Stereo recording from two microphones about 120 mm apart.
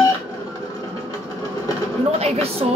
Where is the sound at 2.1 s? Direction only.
60° right (ahead or behind).